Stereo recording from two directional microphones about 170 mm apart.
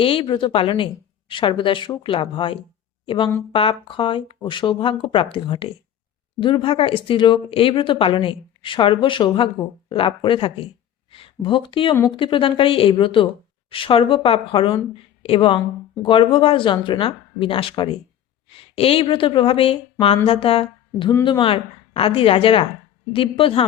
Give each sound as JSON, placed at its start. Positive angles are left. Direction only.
{"t": 0.0, "sound": "speech", "side_deg": 30}